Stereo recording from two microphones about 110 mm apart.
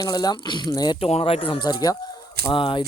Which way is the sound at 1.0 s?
65° left (ahead or behind).